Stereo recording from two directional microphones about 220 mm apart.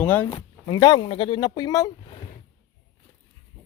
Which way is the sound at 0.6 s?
20° left (ahead or behind).